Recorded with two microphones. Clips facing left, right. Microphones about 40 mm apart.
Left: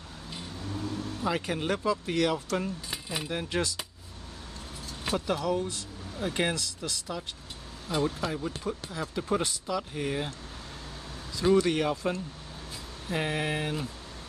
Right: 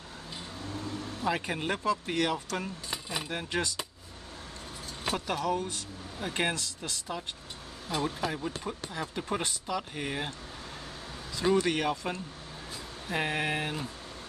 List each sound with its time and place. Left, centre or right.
0.3 s vehicle: centre
1.0 s speech: centre
5.0 s speech: centre
11.5 s speech: right